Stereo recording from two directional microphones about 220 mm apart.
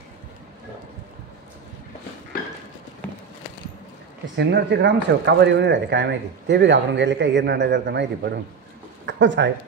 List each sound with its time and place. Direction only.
4.5 s a man's voice: 50° right (ahead or behind)